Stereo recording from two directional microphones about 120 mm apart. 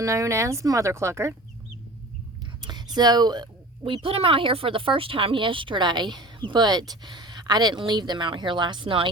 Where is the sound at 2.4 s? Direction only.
35° right (ahead or behind).